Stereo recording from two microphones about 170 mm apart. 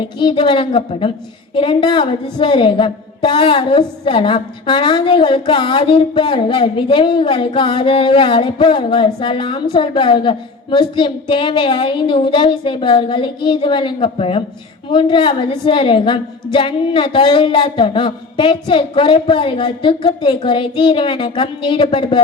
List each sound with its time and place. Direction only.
0.0 s a woman's voice: 30° left (ahead or behind)